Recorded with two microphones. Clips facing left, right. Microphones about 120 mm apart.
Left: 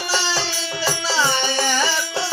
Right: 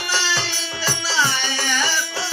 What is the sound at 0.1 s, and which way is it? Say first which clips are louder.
Music: left 1 dB; 25° left (ahead or behind).